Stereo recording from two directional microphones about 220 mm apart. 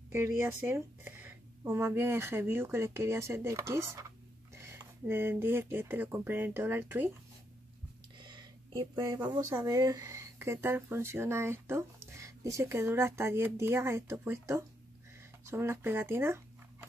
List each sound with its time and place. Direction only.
0.1 s speech: 10° right (ahead or behind)
8.2 s a sound: 20° right (ahead or behind)
9.6 s speech: 15° right (ahead or behind)